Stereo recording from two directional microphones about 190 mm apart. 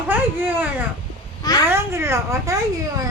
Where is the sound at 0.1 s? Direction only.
10° right (ahead or behind).